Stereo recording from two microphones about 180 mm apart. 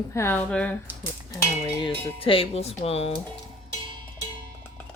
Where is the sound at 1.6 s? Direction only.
30° left (ahead or behind).